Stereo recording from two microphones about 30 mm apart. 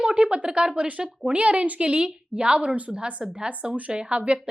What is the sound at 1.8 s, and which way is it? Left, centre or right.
Speech, right.